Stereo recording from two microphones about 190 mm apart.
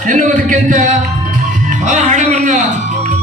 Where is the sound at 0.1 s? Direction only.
40° right (ahead or behind).